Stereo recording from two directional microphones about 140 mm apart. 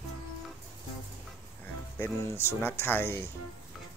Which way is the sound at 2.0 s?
20° left (ahead or behind).